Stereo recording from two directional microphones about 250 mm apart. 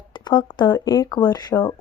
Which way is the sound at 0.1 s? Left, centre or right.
Centre.